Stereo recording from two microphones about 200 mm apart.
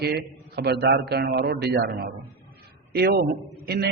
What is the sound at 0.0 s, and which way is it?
A man's voice, 55° right (ahead or behind).